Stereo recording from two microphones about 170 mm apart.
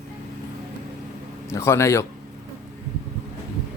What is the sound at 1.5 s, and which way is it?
Speech, 15° left (ahead or behind).